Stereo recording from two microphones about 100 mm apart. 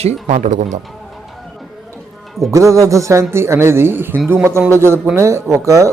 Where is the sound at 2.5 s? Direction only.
30° right (ahead or behind).